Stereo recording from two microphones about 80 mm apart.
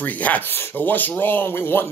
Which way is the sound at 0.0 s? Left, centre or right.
Left.